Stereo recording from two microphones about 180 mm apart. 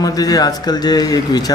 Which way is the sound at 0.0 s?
20° left (ahead or behind).